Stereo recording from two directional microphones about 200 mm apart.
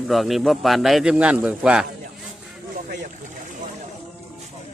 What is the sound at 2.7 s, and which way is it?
Boat, 40° right (ahead or behind).